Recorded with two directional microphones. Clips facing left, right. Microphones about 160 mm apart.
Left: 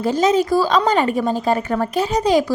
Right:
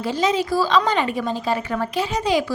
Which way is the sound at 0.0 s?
45° left (ahead or behind).